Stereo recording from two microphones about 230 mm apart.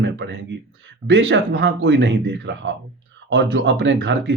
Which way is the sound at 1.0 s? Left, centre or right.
Right.